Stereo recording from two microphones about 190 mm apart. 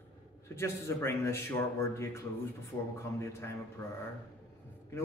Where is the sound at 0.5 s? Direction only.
15° left (ahead or behind).